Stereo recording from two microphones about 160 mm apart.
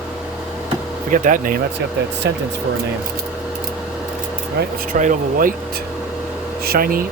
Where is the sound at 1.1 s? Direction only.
55° right (ahead or behind).